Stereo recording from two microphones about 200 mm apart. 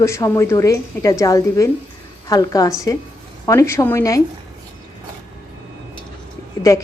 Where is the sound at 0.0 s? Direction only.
15° left (ahead or behind).